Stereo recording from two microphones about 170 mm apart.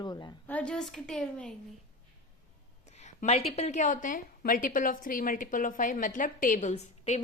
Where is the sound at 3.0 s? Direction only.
40° left (ahead or behind).